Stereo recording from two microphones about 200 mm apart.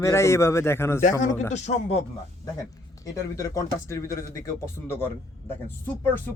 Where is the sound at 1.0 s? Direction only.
40° left (ahead or behind).